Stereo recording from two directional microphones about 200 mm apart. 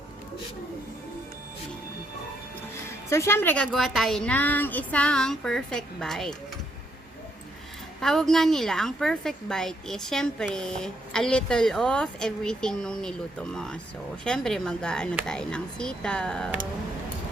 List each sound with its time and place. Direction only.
2.8 s a woman's voice: 15° left (ahead or behind)
8.0 s a woman's voice: centre (ahead or behind)